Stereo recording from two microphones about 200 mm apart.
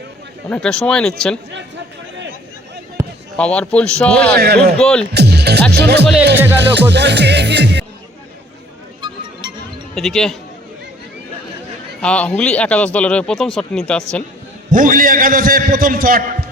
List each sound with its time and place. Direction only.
0.5 s speech: 5° left (ahead or behind)
3.3 s speech: 5° left (ahead or behind)
4.4 s a man's voice: 55° right (ahead or behind)
4.8 s speech: 5° left (ahead or behind)
5.1 s music: 55° right (ahead or behind)
9.9 s speech: centre (ahead or behind)
12.0 s speech: 5° left (ahead or behind)
14.7 s a man's voice: 40° right (ahead or behind)